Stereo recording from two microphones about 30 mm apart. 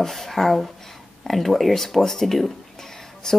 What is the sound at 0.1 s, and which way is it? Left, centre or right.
Speech, centre.